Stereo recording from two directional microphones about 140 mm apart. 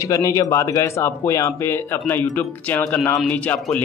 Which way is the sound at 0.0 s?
25° left (ahead or behind).